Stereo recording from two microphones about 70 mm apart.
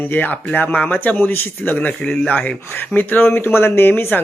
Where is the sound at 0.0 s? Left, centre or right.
Left.